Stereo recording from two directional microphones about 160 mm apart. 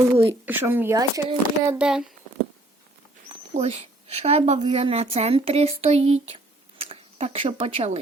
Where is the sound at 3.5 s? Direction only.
40° right (ahead or behind).